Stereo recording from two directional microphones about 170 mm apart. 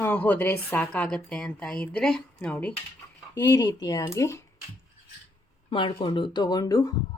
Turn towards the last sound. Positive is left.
turn(degrees=20)  # may be behind; listen again after turning